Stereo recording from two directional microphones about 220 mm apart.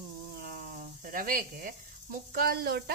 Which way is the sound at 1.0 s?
40° right (ahead or behind).